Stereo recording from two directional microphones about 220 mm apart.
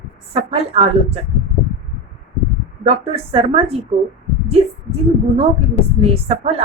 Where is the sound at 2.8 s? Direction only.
25° right (ahead or behind).